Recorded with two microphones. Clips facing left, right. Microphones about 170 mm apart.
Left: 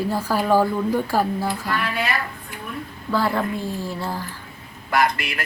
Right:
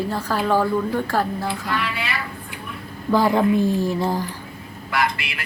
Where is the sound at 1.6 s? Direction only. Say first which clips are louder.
Left 1 dB; 45° left (ahead or behind).